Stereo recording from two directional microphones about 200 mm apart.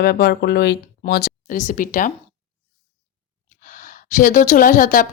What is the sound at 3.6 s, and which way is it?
Speech, 45° left (ahead or behind).